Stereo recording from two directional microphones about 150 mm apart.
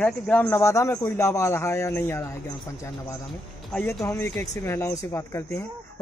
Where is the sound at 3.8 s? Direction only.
20° left (ahead or behind).